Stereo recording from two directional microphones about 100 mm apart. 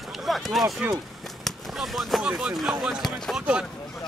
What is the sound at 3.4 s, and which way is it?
Speech, 10° right (ahead or behind).